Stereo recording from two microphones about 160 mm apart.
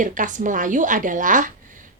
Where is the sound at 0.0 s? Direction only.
55° right (ahead or behind).